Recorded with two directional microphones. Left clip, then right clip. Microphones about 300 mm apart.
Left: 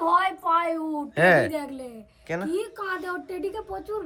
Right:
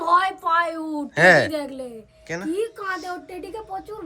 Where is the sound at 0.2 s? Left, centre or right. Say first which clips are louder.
Right 2 dB; right.